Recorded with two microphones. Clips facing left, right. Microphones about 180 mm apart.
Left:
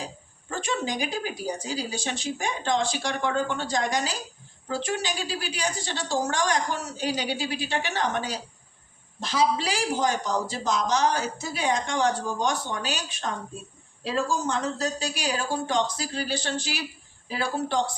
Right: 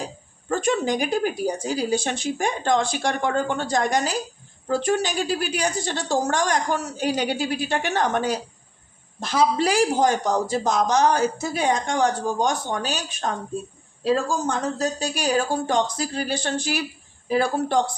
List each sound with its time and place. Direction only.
0.4 s a woman's voice: 50° right (ahead or behind)